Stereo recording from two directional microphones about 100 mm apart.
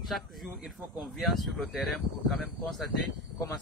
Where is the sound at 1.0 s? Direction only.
Centre (ahead or behind).